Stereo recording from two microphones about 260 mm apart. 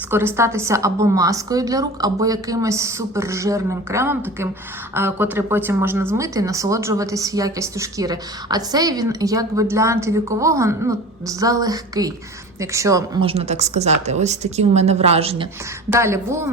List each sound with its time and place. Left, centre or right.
0.1 s a woman's voice: centre
15.9 s a woman's voice: centre